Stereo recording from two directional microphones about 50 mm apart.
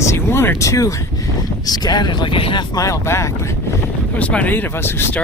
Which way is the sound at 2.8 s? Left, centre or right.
Left.